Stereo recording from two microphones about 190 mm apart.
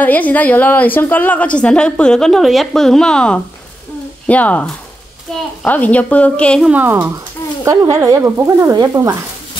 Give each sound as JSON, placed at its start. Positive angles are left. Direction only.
{"t": 0.0, "sound": "a woman's voice", "side_deg": 10}
{"t": 6.7, "sound": "speech", "side_deg": -10}